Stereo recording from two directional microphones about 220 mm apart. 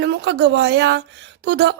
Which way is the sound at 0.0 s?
50° right (ahead or behind).